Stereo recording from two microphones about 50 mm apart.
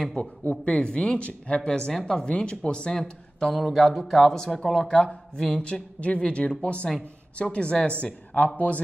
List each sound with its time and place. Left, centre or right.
0.2 s speech: left